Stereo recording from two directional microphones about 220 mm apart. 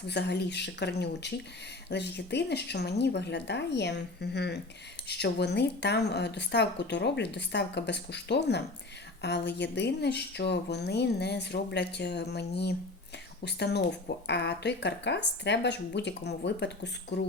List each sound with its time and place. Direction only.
0.1 s a woman's voice: 50° left (ahead or behind)